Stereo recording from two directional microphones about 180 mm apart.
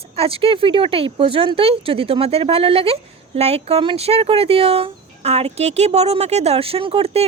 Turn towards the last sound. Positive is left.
turn(degrees=-35)  # may be behind; listen again after turning